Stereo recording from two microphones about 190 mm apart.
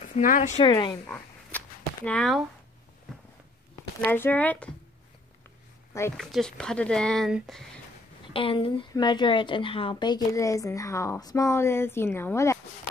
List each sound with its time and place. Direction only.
0.1 s speech: 45° left (ahead or behind)
0.7 s a woman's voice: 25° left (ahead or behind)
1.0 s a sound: 10° left (ahead or behind)
2.0 s speech: 5° left (ahead or behind)
4.0 s speech: 10° left (ahead or behind)
6.1 s speech: centre (ahead or behind)
8.3 s a woman's voice: 30° left (ahead or behind)